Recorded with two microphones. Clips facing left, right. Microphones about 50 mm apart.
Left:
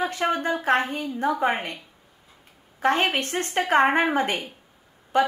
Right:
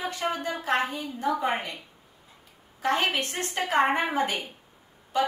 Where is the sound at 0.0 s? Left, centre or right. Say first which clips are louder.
Left 5 dB; left.